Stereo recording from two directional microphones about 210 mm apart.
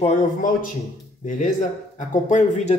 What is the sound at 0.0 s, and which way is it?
Speech, 35° left (ahead or behind).